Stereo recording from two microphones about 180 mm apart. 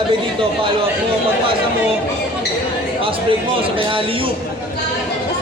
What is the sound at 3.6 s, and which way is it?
Speech, 30° right (ahead or behind).